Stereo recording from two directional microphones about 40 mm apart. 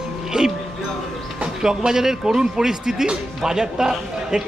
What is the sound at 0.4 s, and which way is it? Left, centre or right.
Speech, centre.